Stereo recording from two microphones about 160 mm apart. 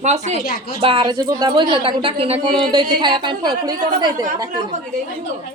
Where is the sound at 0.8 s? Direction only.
30° right (ahead or behind).